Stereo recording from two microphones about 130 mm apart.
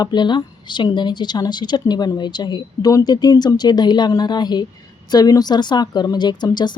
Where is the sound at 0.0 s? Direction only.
35° left (ahead or behind).